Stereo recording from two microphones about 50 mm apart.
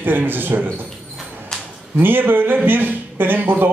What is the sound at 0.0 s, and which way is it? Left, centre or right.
Speech, right.